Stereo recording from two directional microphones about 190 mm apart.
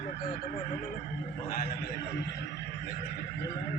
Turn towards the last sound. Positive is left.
turn(degrees=55)  # may be behind; listen again after turning